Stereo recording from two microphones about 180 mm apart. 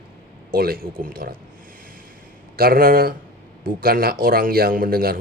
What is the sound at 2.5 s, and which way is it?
A man's voice, 55° right (ahead or behind).